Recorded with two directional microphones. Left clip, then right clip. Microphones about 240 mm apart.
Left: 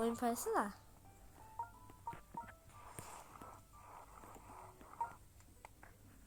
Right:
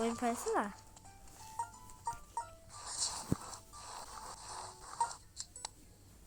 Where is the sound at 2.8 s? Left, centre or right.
Right.